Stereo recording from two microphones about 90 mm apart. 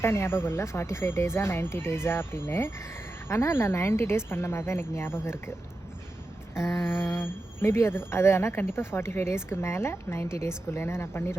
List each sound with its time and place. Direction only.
0.0 s speech: 25° left (ahead or behind)
6.5 s speech: 30° left (ahead or behind)